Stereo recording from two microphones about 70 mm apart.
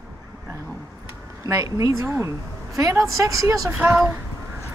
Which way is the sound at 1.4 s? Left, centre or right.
Right.